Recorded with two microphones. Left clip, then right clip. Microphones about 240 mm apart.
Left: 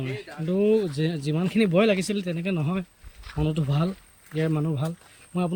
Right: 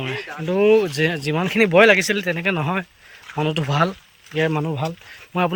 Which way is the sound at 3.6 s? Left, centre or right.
Right.